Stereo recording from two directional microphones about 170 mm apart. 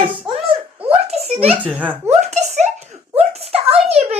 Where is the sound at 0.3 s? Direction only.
30° right (ahead or behind).